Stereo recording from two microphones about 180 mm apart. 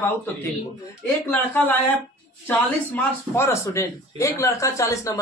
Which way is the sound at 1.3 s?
10° left (ahead or behind).